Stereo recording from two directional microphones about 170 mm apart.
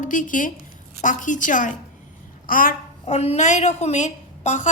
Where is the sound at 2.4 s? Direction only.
55° left (ahead or behind).